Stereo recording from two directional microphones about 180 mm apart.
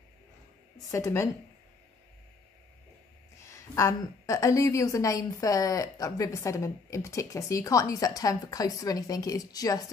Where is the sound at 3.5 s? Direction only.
15° left (ahead or behind).